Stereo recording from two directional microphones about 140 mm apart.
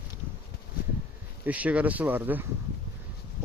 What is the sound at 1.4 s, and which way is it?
Speech, 10° right (ahead or behind).